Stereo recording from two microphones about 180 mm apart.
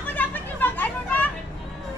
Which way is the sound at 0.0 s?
10° left (ahead or behind).